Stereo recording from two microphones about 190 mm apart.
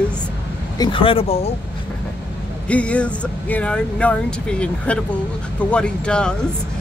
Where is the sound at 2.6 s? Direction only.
5° left (ahead or behind).